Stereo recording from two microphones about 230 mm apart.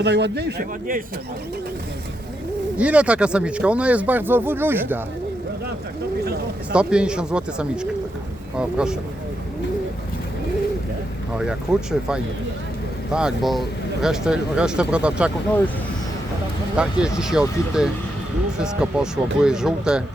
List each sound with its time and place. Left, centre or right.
0.0 s speech: right
2.7 s speech: centre
6.2 s speech: right
6.7 s speech: centre
11.3 s speech: centre
16.7 s speech: centre